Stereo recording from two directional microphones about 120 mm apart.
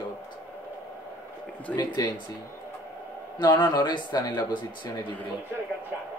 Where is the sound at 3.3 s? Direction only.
40° left (ahead or behind).